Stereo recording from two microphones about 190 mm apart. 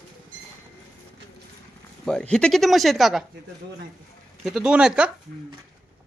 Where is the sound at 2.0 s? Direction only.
5° left (ahead or behind).